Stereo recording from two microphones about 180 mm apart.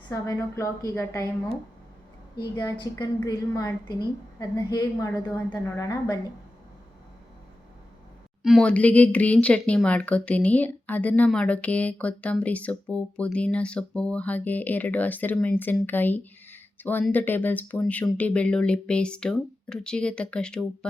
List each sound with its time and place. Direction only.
0.1 s speech: 20° left (ahead or behind)
2.4 s a woman's voice: 20° left (ahead or behind)
8.4 s speech: 5° left (ahead or behind)